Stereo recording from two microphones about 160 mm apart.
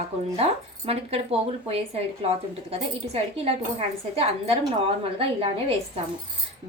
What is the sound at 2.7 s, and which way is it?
A woman's voice, 40° right (ahead or behind).